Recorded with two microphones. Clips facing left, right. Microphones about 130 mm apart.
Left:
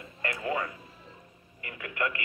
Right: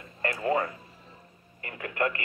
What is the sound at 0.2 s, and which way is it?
Music, 40° right (ahead or behind).